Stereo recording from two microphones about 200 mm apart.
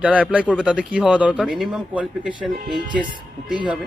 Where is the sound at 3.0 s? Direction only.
25° right (ahead or behind).